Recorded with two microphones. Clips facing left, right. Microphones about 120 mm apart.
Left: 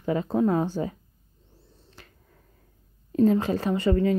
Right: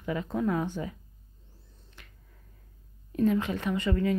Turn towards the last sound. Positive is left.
turn(degrees=30)  # may be behind; listen again after turning